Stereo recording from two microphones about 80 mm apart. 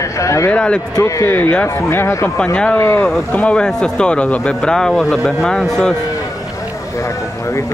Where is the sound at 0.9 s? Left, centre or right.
Left.